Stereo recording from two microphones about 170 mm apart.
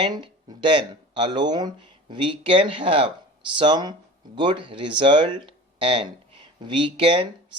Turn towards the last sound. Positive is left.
turn(degrees=-30)  # may be behind; listen again after turning